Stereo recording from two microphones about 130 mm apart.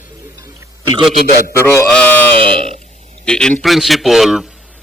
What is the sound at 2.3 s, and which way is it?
Speech, 45° right (ahead or behind).